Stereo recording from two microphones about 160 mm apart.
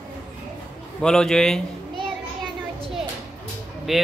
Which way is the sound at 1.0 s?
5° left (ahead or behind).